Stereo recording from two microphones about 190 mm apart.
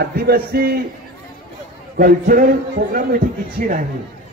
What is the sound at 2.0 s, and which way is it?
A man's voice, 50° right (ahead or behind).